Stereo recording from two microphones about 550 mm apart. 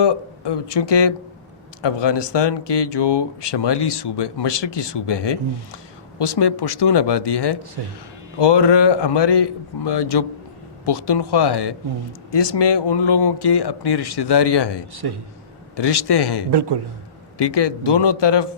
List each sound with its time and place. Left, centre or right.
0.0 s speech: left
14.9 s a man's voice: right
15.7 s speech: left
16.5 s a man's voice: right
17.3 s speech: left